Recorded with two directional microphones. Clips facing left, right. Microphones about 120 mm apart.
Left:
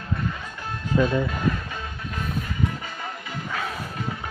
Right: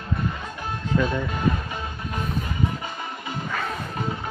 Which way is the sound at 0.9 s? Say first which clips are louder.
Left 2 dB; 15° left (ahead or behind).